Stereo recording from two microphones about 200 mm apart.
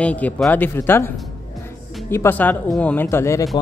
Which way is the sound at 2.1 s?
10° left (ahead or behind).